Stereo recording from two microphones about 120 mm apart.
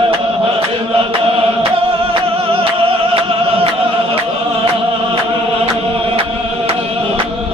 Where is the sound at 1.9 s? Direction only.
50° right (ahead or behind).